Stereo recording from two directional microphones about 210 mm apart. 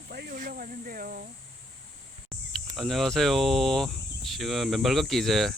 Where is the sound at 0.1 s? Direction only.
45° right (ahead or behind).